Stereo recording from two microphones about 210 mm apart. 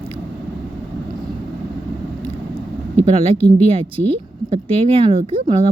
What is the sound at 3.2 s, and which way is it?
Speech, 25° right (ahead or behind).